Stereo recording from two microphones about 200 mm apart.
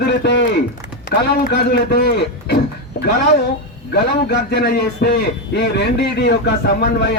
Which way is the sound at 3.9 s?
55° left (ahead or behind).